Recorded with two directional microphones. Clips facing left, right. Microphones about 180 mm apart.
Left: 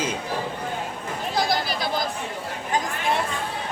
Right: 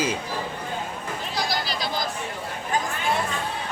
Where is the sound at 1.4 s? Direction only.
55° left (ahead or behind).